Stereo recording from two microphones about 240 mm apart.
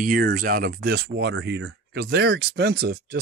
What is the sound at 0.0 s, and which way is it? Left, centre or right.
Speech, right.